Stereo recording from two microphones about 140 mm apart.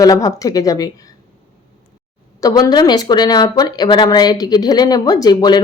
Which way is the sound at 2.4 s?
25° left (ahead or behind).